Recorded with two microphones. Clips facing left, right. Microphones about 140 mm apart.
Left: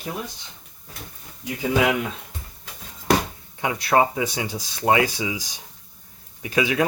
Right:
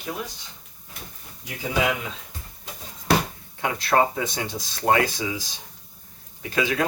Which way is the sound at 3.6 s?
10° left (ahead or behind).